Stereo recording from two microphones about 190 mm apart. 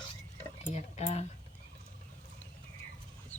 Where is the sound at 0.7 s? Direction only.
35° left (ahead or behind).